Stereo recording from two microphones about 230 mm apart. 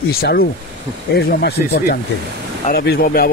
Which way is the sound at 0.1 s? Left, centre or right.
Left.